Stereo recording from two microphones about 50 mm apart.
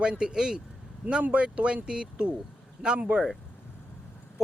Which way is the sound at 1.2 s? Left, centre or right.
Right.